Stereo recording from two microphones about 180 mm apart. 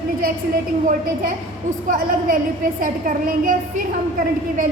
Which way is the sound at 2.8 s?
50° right (ahead or behind).